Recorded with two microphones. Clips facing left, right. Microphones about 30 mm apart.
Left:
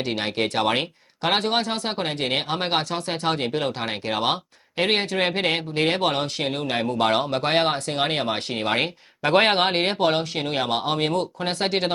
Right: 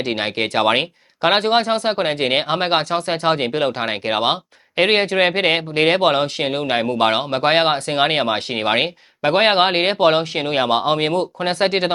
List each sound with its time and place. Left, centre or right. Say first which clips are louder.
0.1 s speech: right 4 dB; right
9.2 s speech: right 4 dB; centre